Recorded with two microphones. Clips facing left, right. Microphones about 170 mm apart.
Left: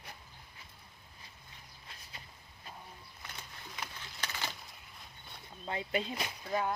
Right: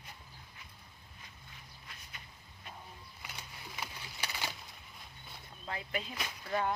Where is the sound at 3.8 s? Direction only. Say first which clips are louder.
Even; 10° right (ahead or behind).